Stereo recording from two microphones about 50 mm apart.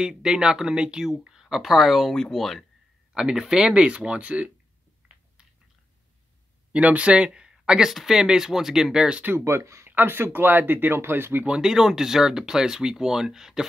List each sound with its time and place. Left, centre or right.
0.0 s speech: centre
3.2 s speech: centre
5.0 s a sound: right
6.7 s speech: right
7.9 s speech: centre
9.4 s speech: right
9.8 s speech: right
11.6 s speech: centre